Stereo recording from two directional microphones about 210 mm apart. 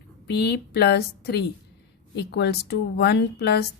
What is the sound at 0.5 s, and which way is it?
A woman's voice, 50° left (ahead or behind).